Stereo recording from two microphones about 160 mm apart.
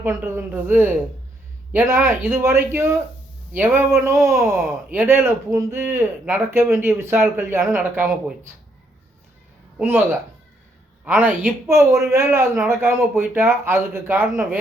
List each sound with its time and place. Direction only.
0.3 s speech: 15° right (ahead or behind)
9.7 s a man's voice: 15° right (ahead or behind)